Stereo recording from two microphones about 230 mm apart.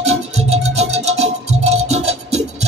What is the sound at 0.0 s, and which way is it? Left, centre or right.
Music, right.